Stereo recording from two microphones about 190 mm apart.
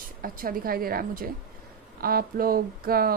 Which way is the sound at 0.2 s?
50° right (ahead or behind).